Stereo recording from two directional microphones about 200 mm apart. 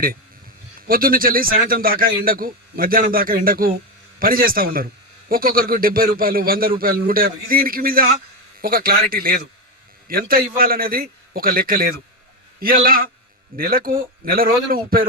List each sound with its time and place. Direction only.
0.8 s a man's voice: 45° right (ahead or behind)